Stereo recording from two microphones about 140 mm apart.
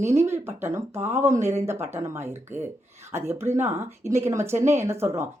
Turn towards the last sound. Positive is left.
turn(degrees=-20)  # may be behind; listen again after turning